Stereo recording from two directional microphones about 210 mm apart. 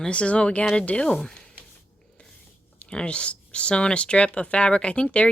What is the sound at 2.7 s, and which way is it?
Speech, 5° left (ahead or behind).